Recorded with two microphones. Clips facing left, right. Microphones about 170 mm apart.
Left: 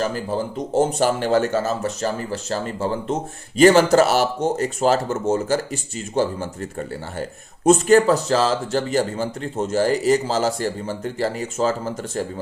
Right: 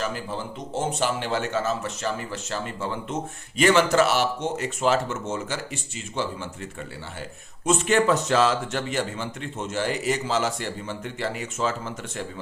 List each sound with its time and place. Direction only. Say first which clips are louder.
0.0 s speech: left 7 dB; 40° left (ahead or behind)